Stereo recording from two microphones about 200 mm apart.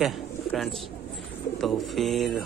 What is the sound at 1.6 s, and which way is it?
Speech, centre (ahead or behind).